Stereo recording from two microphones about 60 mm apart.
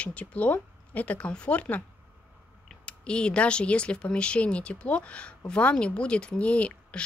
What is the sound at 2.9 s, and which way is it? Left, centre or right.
A woman's voice, centre.